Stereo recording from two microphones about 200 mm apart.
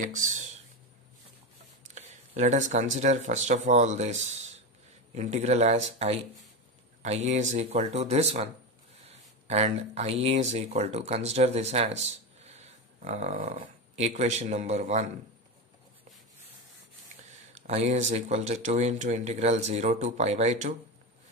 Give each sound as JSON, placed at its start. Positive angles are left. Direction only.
{"t": 0.0, "sound": "speech", "side_deg": -40}
{"t": 2.0, "sound": "a sound", "side_deg": -35}
{"t": 3.0, "sound": "speech", "side_deg": -35}
{"t": 17.2, "sound": "speech", "side_deg": -35}